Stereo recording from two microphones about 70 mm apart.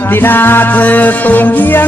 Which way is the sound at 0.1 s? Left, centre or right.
Left.